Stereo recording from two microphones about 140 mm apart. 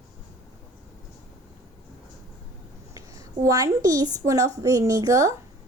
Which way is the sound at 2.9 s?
20° right (ahead or behind).